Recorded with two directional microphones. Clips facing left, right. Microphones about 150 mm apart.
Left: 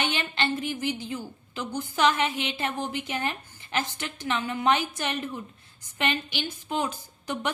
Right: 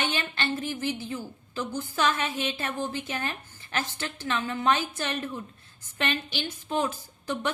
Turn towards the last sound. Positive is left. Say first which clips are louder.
# right 1 dB
turn(degrees=15)  # may be behind; listen again after turning